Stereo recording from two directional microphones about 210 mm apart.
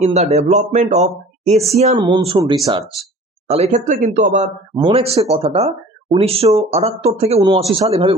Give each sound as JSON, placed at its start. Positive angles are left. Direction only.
{"t": 0.0, "sound": "speech", "side_deg": -30}
{"t": 4.7, "sound": "speech", "side_deg": -25}